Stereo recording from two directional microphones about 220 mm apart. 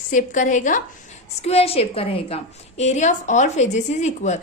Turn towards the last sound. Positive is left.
turn(degrees=30)  # may be behind; listen again after turning